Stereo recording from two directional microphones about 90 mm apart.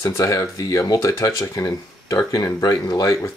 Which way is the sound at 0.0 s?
40° left (ahead or behind).